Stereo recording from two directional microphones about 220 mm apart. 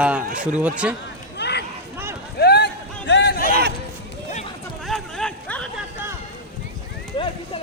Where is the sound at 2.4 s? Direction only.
50° left (ahead or behind).